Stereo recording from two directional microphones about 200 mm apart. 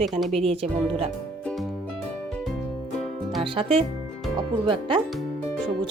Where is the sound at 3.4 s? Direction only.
25° right (ahead or behind).